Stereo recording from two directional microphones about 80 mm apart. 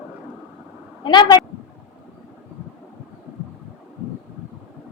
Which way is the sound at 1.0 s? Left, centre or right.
Left.